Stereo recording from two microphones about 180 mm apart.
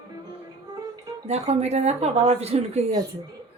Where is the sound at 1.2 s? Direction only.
40° right (ahead or behind).